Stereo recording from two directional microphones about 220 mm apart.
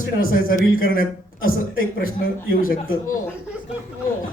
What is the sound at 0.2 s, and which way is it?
Speech, 40° left (ahead or behind).